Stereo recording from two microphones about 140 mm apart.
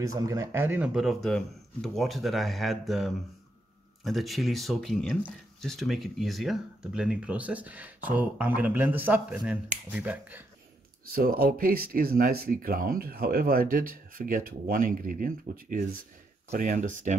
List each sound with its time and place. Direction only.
0.0 s speech: 25° right (ahead or behind)
11.1 s speech: 90° right
16.5 s speech: 65° right (ahead or behind)